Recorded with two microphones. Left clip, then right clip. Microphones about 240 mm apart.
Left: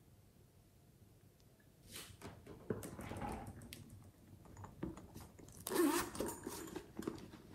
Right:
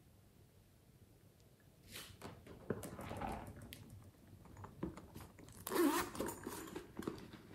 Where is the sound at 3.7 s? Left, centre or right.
Centre.